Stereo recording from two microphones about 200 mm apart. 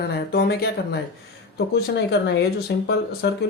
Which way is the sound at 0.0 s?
50° left (ahead or behind).